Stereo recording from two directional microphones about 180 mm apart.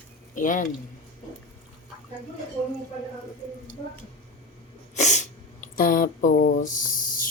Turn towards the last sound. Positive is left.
turn(degrees=50)  # may be behind; listen again after turning